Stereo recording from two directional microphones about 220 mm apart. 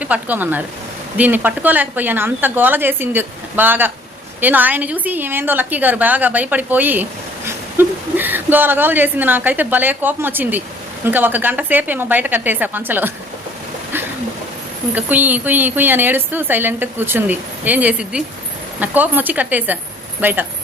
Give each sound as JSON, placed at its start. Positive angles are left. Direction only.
{"t": 0.0, "sound": "a woman's voice", "side_deg": -5}
{"t": 14.9, "sound": "a woman's voice", "side_deg": -10}